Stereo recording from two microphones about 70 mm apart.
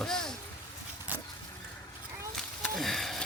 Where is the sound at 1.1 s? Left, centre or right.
Right.